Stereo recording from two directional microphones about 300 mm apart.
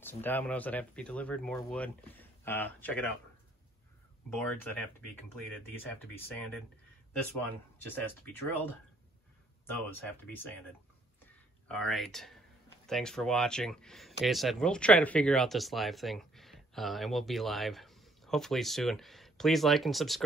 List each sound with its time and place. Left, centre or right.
0.0 s speech: centre
4.4 s speech: centre
7.8 s speech: centre
11.6 s speech: centre